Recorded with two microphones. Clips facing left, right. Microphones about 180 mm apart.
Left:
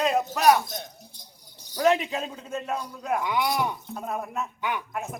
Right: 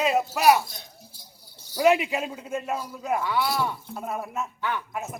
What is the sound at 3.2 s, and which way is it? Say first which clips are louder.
Speech: left 1 dB; 15° left (ahead or behind).